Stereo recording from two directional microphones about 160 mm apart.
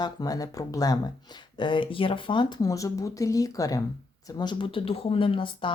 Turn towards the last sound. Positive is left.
turn(degrees=30)  # may be behind; listen again after turning